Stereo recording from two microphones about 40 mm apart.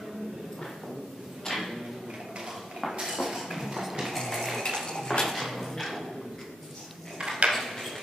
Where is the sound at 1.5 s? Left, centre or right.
Centre.